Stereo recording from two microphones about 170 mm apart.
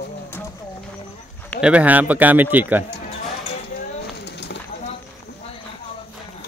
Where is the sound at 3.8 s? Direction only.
75° left (ahead or behind).